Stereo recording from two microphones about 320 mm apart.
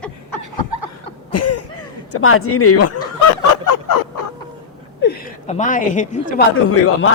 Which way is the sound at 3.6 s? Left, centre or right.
Left.